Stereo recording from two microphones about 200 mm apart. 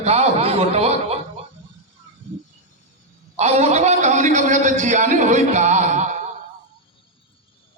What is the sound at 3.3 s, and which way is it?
A man's voice, 35° right (ahead or behind).